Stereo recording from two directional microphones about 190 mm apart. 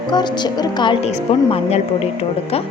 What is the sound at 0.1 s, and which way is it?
Speech, 20° left (ahead or behind).